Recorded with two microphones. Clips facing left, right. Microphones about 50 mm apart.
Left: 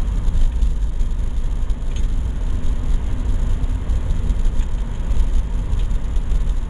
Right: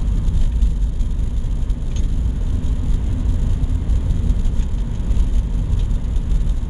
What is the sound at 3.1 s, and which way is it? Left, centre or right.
Vehicle, centre.